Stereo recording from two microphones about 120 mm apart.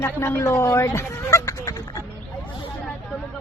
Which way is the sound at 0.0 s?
20° left (ahead or behind).